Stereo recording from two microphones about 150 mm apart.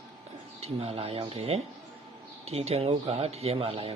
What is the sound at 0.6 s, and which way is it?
A man's voice, 45° right (ahead or behind).